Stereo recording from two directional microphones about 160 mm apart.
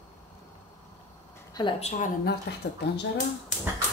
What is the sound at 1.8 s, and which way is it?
Speech, 45° left (ahead or behind).